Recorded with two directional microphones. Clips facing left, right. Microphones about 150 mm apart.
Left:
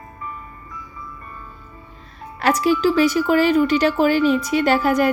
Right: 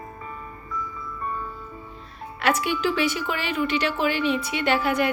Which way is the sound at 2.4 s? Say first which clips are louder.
Left 6 dB; 40° left (ahead or behind).